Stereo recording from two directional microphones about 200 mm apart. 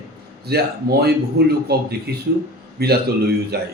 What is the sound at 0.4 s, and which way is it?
A man's voice, 50° right (ahead or behind).